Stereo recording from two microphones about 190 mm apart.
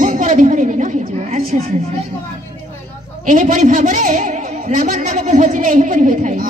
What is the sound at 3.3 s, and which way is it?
A man's voice, 45° right (ahead or behind).